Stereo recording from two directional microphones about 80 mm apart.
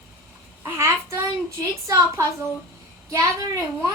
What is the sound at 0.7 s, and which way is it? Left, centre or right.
Child singing, right.